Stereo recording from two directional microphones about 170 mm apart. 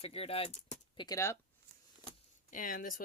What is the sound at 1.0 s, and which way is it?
Speech, 20° left (ahead or behind).